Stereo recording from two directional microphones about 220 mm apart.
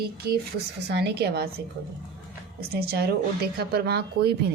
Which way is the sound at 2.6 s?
45° right (ahead or behind).